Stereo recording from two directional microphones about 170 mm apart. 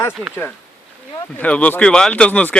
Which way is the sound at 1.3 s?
10° left (ahead or behind).